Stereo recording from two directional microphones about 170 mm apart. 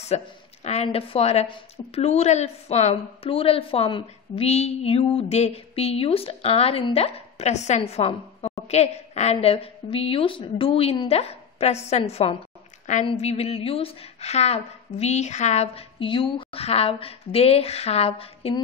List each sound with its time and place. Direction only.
0.1 s a woman's voice: 40° left (ahead or behind)